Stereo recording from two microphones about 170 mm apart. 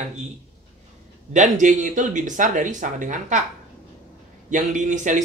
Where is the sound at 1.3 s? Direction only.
45° right (ahead or behind).